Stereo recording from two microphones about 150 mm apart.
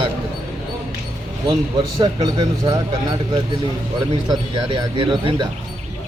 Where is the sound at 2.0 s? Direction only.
30° right (ahead or behind).